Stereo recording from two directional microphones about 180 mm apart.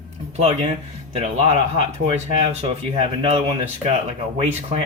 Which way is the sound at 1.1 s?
35° right (ahead or behind).